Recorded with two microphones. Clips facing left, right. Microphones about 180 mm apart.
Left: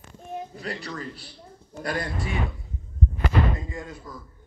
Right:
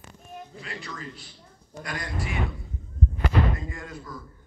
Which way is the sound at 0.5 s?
35° left (ahead or behind).